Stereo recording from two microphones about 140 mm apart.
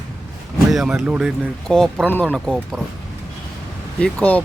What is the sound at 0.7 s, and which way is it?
Speech, centre (ahead or behind).